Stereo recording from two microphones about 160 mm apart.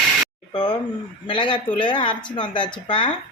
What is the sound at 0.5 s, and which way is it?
Speech, 25° left (ahead or behind).